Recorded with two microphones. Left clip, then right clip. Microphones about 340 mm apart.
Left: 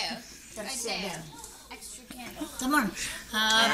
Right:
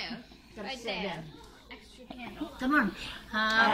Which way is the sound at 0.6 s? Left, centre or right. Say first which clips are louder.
Left 2 dB; left.